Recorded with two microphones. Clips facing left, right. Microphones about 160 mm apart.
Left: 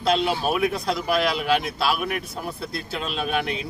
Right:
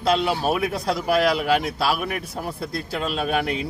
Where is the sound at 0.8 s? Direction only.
40° right (ahead or behind).